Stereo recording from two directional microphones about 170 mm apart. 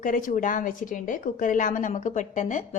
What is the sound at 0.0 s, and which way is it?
A woman's voice, 50° left (ahead or behind).